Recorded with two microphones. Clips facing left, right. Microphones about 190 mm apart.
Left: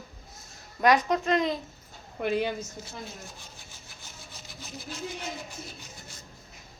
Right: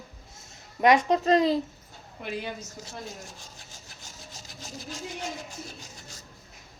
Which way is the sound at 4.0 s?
40° right (ahead or behind).